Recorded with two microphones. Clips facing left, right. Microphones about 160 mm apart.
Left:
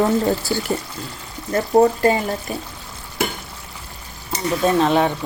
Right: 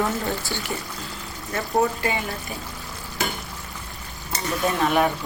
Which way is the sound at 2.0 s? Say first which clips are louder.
Left 8 dB; 40° left (ahead or behind).